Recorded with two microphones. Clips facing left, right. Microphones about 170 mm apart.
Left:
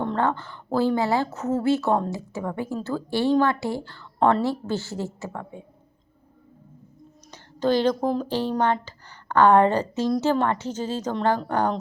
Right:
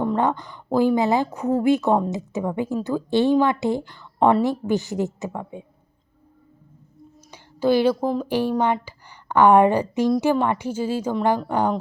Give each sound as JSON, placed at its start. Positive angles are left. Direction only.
{"t": 0.0, "sound": "speech", "side_deg": -10}
{"t": 7.3, "sound": "speech", "side_deg": -10}